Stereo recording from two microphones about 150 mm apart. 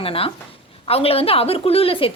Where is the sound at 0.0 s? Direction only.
40° left (ahead or behind).